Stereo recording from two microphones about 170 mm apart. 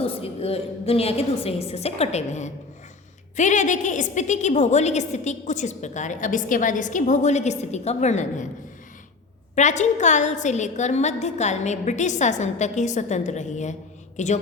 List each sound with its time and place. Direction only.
0.0 s a woman's voice: 35° left (ahead or behind)
9.6 s a woman's voice: 45° left (ahead or behind)